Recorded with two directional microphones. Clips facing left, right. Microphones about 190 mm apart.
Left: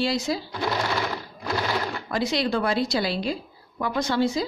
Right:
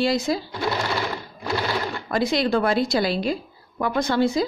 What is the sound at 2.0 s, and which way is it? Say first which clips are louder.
A woman's voice: right 4 dB; 50° right (ahead or behind).